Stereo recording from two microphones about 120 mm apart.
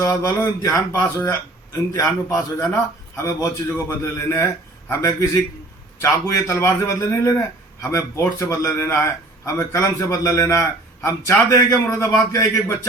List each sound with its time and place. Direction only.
0.0 s a man's voice: 30° left (ahead or behind)